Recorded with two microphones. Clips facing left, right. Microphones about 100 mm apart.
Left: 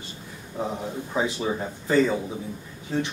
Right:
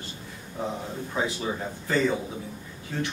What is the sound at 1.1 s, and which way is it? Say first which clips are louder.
A man's voice: left 3 dB; 15° left (ahead or behind).